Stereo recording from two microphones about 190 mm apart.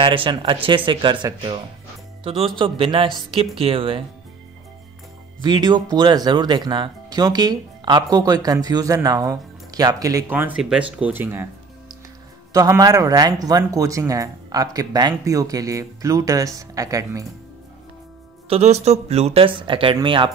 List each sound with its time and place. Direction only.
0.0 s speech: 25° right (ahead or behind)
5.4 s speech: 20° right (ahead or behind)
12.5 s speech: 15° right (ahead or behind)
18.5 s speech: 35° right (ahead or behind)